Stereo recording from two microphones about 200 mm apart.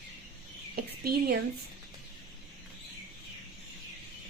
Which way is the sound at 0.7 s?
50° right (ahead or behind).